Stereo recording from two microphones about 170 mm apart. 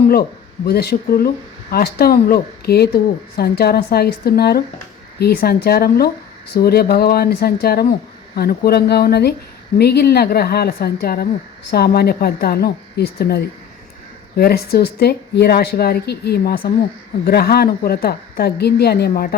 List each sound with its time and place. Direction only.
0.1 s speech: 65° left (ahead or behind)